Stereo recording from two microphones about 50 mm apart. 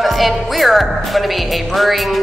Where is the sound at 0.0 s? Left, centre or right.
Centre.